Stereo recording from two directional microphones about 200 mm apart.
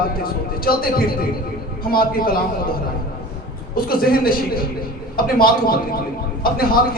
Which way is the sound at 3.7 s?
50° left (ahead or behind).